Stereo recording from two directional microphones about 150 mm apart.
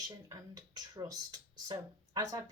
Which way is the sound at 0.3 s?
25° right (ahead or behind).